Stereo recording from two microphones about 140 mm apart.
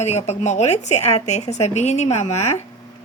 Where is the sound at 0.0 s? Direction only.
55° left (ahead or behind).